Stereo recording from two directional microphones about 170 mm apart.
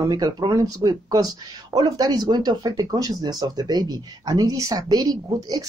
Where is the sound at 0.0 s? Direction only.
25° right (ahead or behind).